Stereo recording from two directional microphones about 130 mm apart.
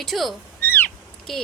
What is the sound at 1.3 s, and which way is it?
Speech, centre (ahead or behind).